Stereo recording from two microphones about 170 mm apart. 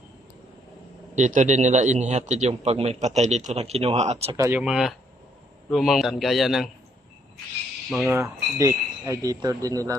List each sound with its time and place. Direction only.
1.1 s a man's voice: 45° right (ahead or behind)
4.4 s speech: 15° right (ahead or behind)
4.6 s a man's voice: centre (ahead or behind)
7.9 s a man's voice: centre (ahead or behind)
8.1 s speech: 15° right (ahead or behind)